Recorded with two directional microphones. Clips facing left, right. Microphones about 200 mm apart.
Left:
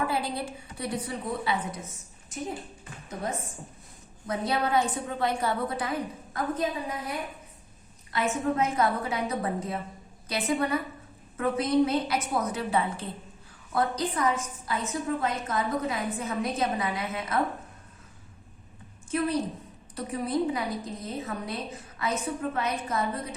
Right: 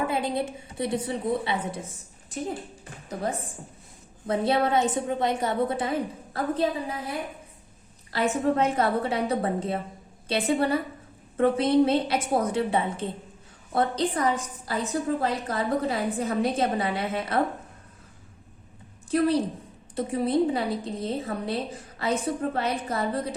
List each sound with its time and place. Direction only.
0.1 s a woman's voice: 20° right (ahead or behind)
4.3 s a woman's voice: 30° right (ahead or behind)
19.1 s a woman's voice: 35° right (ahead or behind)